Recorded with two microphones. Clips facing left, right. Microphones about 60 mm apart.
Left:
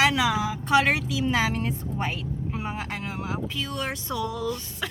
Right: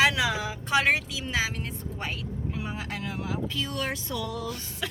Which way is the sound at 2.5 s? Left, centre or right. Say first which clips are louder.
Left 3 dB; left.